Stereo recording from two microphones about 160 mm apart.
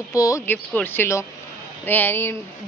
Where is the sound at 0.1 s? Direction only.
20° left (ahead or behind).